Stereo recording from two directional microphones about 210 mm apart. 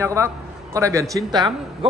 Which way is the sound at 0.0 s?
15° right (ahead or behind).